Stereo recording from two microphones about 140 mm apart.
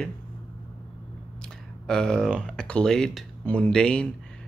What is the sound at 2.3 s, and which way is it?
Speech, 5° left (ahead or behind).